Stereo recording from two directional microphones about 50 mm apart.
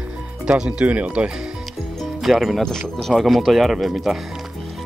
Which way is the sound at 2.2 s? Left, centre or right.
Centre.